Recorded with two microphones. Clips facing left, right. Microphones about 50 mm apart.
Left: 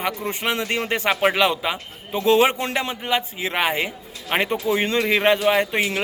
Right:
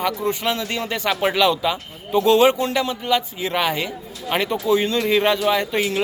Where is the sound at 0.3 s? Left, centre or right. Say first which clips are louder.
Right 1 dB; left.